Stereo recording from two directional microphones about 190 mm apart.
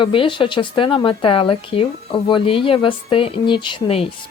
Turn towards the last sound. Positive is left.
turn(degrees=30)  # may be behind; listen again after turning